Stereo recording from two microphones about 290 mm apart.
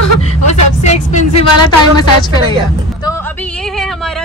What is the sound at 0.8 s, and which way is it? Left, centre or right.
Speech, left.